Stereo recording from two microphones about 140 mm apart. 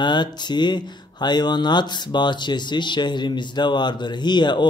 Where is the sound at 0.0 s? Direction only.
30° left (ahead or behind).